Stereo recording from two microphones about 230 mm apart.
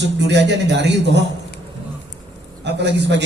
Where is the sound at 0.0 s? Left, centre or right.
Right.